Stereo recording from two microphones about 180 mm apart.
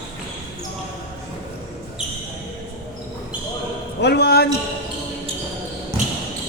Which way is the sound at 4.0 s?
65° left (ahead or behind).